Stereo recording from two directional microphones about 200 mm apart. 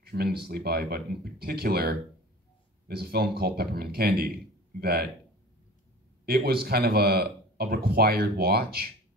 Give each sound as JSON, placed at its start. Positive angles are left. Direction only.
{"t": 0.0, "sound": "speech", "side_deg": -50}
{"t": 6.2, "sound": "speech", "side_deg": -50}